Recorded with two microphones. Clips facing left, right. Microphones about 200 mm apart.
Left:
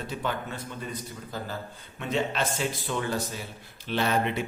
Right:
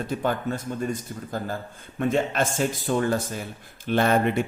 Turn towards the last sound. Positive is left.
turn(degrees=-50)  # may be behind; listen again after turning